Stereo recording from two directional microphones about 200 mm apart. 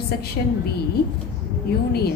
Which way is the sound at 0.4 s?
50° left (ahead or behind).